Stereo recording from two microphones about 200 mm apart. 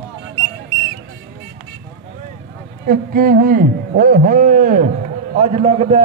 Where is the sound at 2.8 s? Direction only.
45° right (ahead or behind).